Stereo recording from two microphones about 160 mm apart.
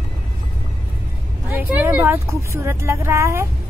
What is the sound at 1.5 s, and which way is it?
Speech, 10° right (ahead or behind).